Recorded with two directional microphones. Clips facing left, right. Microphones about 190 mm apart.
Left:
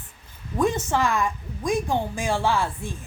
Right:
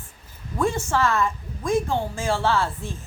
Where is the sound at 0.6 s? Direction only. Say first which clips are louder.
Even; 20° left (ahead or behind).